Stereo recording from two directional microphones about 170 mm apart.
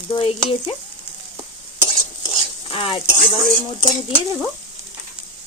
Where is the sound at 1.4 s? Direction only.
25° right (ahead or behind).